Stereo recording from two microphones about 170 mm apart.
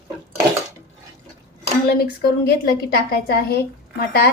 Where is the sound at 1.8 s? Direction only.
65° left (ahead or behind).